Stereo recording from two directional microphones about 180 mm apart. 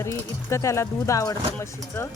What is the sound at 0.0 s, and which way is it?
Speech, 15° left (ahead or behind).